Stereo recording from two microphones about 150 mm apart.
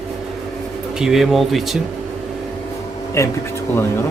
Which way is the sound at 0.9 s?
Centre (ahead or behind).